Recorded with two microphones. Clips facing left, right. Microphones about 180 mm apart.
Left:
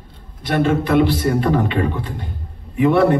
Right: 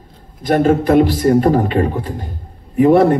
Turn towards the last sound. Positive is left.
turn(degrees=-45)  # may be behind; listen again after turning